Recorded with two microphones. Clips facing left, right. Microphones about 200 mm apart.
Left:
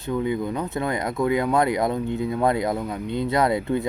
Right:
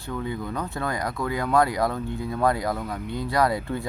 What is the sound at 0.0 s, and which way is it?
Speech, 20° left (ahead or behind).